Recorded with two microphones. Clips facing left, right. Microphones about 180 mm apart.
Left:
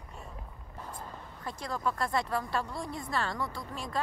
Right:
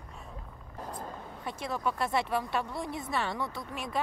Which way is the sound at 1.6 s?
25° right (ahead or behind).